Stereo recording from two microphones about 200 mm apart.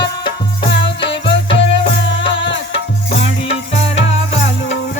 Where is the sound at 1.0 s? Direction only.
60° left (ahead or behind).